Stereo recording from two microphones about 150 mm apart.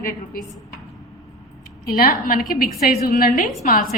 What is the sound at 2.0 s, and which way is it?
Speech, 70° left (ahead or behind).